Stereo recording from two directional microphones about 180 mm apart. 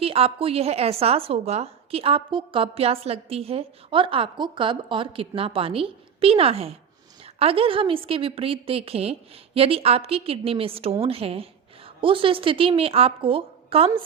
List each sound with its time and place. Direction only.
0.0 s a woman's voice: 30° right (ahead or behind)